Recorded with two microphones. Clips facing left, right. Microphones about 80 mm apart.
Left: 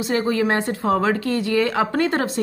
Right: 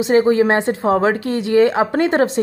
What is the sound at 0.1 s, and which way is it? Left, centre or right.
A woman's voice, right.